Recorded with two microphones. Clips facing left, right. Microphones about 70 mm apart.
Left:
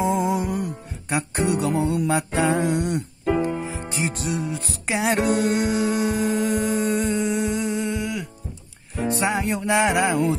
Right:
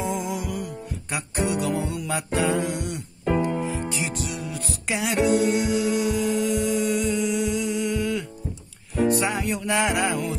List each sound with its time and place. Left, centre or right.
0.0 s music: left
3.4 s music: left
5.1 s music: left
9.2 s music: left